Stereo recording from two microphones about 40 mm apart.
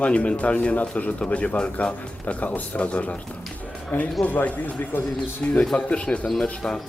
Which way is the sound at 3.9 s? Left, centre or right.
Left.